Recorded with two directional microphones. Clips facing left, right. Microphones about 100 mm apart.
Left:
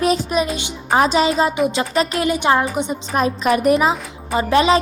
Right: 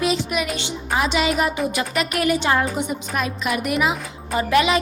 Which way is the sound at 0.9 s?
40° left (ahead or behind).